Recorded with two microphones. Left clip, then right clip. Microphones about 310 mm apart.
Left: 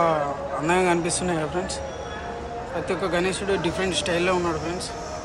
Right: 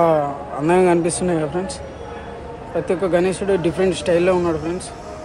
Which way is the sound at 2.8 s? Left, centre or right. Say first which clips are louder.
Right 6 dB; centre.